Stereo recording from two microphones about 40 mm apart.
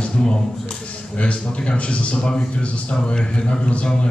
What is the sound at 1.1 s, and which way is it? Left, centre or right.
A man's voice, left.